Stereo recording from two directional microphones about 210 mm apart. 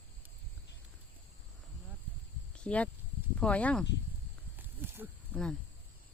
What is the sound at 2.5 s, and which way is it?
Speech, 5° left (ahead or behind).